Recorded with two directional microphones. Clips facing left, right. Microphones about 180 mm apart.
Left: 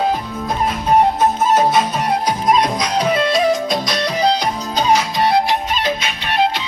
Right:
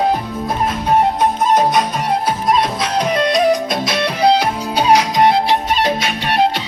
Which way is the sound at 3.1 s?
Centre (ahead or behind).